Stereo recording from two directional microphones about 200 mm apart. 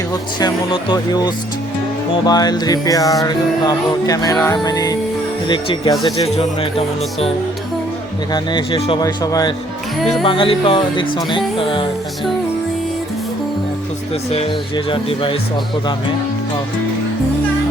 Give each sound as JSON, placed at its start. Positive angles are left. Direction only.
{"t": 0.1, "sound": "speech", "side_deg": 20}
{"t": 2.2, "sound": "music", "side_deg": 20}
{"t": 5.5, "sound": "speech", "side_deg": 25}
{"t": 10.0, "sound": "speech", "side_deg": 0}
{"t": 10.2, "sound": "speech", "side_deg": 25}
{"t": 14.1, "sound": "speech", "side_deg": 30}